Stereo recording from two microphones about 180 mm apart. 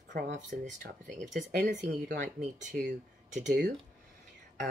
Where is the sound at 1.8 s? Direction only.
70° right (ahead or behind).